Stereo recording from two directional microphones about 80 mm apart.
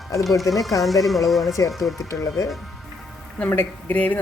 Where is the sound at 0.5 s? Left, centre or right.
Left.